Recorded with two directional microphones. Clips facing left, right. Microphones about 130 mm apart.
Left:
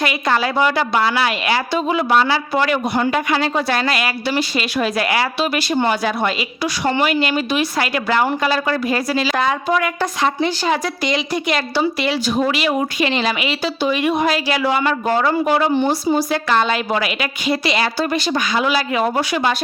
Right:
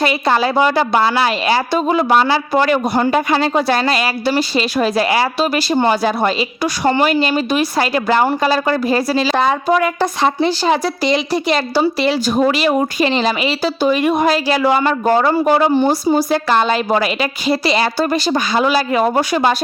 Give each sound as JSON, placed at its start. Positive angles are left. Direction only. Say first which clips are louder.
{"t": 0.0, "sound": "a woman's voice", "louder": "right 3 dB", "side_deg": -30}